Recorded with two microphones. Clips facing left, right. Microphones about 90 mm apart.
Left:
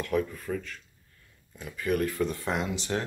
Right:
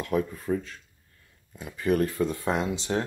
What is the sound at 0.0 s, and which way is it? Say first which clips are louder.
Speech: right 1 dB; 30° right (ahead or behind).